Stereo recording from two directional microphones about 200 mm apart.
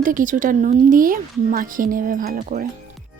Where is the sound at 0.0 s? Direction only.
40° right (ahead or behind).